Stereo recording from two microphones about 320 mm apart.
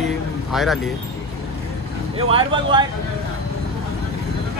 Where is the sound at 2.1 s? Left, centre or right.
Centre.